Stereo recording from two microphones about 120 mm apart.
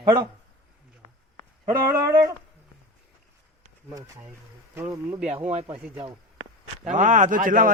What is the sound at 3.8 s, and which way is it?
A man's voice, 20° right (ahead or behind).